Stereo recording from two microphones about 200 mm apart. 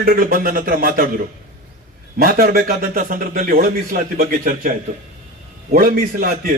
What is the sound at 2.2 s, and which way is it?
A man's voice, 50° right (ahead or behind).